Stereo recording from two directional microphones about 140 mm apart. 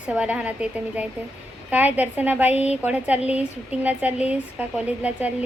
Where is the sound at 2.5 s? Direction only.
50° left (ahead or behind).